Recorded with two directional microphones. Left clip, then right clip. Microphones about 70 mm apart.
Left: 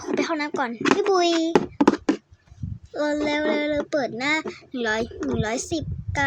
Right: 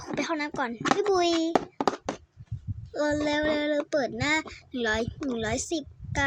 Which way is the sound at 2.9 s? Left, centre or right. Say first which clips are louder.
Left 3 dB; right.